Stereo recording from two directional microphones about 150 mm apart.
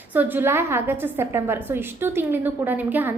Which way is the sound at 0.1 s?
10° right (ahead or behind).